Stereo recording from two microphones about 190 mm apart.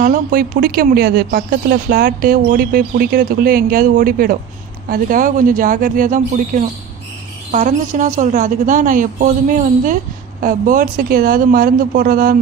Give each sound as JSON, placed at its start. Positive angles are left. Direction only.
{"t": 0.0, "sound": "speech", "side_deg": -50}